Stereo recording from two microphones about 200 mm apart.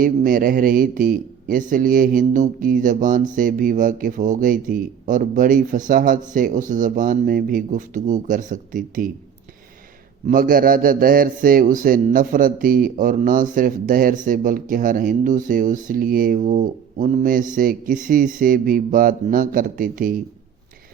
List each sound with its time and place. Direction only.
0.0 s a man's voice: 45° right (ahead or behind)
10.2 s a man's voice: 45° right (ahead or behind)